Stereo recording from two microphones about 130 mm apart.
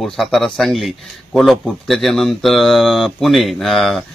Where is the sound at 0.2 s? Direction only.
Centre (ahead or behind).